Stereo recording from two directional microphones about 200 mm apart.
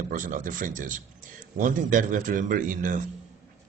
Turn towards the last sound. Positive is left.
turn(degrees=-40)  # may be behind; listen again after turning